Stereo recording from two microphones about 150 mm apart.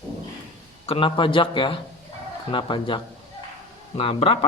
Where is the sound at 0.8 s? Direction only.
35° left (ahead or behind).